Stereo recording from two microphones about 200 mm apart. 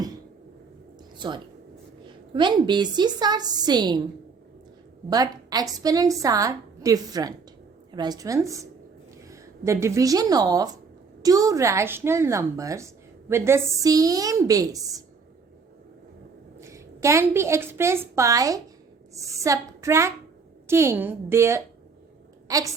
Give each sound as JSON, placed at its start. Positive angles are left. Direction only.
{"t": 1.2, "sound": "a woman's voice", "side_deg": -25}
{"t": 5.0, "sound": "a woman's voice", "side_deg": -20}
{"t": 16.6, "sound": "a woman's voice", "side_deg": -15}